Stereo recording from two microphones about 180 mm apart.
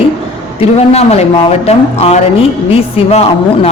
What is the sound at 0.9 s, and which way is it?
A man's voice, 35° left (ahead or behind).